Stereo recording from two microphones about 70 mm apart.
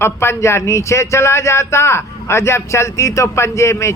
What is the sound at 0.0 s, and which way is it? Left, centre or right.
Speech, left.